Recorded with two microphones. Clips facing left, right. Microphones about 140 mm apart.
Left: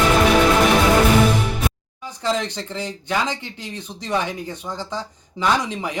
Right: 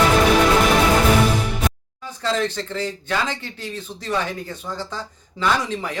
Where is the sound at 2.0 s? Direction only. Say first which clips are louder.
Even; 15° left (ahead or behind).